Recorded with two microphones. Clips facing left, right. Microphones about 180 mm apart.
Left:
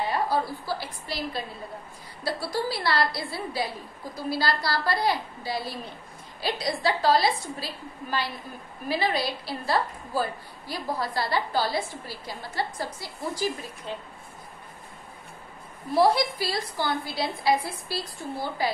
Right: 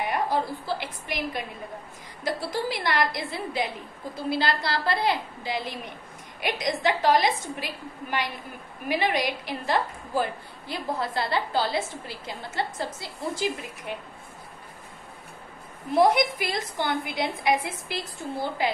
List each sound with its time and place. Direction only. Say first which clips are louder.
0.0 s a woman's voice: even; 20° right (ahead or behind)
15.9 s a woman's voice: right 1 dB; 20° right (ahead or behind)